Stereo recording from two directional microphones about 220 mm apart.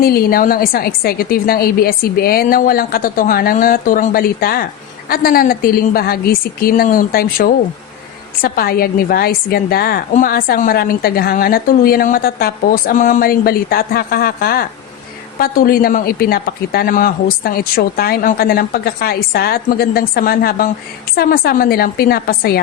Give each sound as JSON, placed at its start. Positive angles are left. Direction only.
{"t": 0.0, "sound": "a woman's voice", "side_deg": 45}